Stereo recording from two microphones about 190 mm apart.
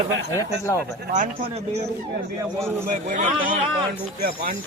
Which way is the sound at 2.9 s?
40° right (ahead or behind).